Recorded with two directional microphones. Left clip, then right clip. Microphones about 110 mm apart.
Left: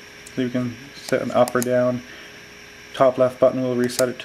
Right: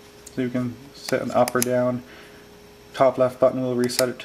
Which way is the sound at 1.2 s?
20° left (ahead or behind).